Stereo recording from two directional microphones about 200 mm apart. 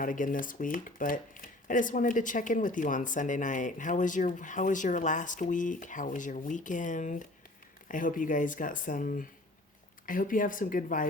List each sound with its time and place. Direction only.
0.0 s speech: 45° left (ahead or behind)